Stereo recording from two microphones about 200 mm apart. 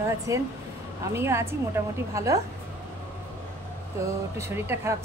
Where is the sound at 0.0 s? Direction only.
15° right (ahead or behind).